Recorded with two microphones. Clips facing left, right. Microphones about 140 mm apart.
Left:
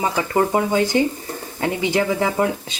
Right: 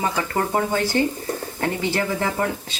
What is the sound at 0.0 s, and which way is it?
Speech, 15° left (ahead or behind).